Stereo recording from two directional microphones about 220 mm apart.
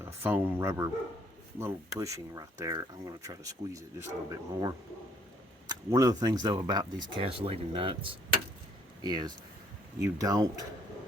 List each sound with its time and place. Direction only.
0.0 s speech: 10° right (ahead or behind)